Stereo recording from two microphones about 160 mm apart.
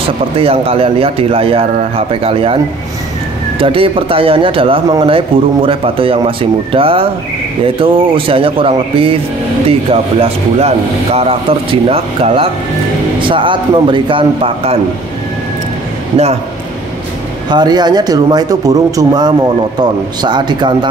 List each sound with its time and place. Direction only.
0.4 s speech: 35° right (ahead or behind)
17.5 s speech: 25° right (ahead or behind)